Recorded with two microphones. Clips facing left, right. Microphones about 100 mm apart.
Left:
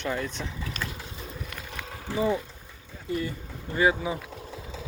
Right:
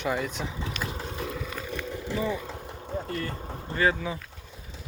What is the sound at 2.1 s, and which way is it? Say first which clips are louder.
Speech: left 4 dB; 20° left (ahead or behind).